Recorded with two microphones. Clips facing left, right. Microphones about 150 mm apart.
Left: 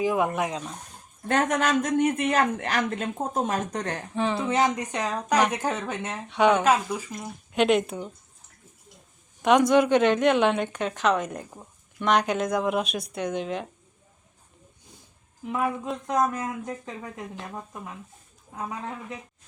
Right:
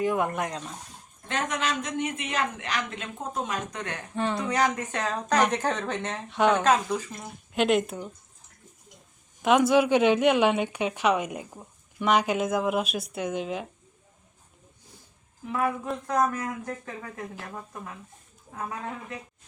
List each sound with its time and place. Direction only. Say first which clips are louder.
0.0 s speech: left 2 dB; 5° left (ahead or behind)
1.3 s speech: left 6 dB; 45° left (ahead or behind)
4.1 s speech: left 1 dB; centre (ahead or behind)
4.4 s speech: left 2 dB; 20° left (ahead or behind)
7.5 s speech: left 2 dB; centre (ahead or behind)
9.4 s a woman's voice: left 1 dB; 5° right (ahead or behind)
15.5 s speech: even; 20° left (ahead or behind)